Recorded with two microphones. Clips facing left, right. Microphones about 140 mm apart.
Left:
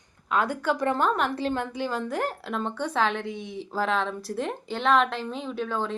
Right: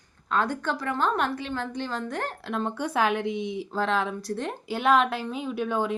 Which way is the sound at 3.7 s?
Centre (ahead or behind).